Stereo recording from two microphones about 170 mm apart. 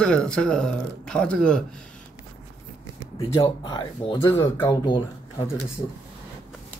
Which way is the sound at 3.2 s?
30° left (ahead or behind).